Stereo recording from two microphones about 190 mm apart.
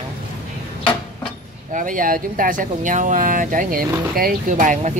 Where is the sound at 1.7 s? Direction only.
45° right (ahead or behind).